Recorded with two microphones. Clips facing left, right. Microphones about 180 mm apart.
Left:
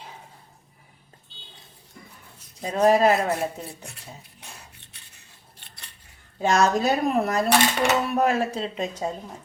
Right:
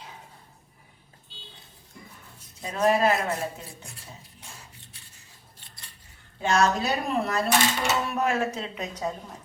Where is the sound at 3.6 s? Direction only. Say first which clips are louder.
Left 5 dB; 65° left (ahead or behind).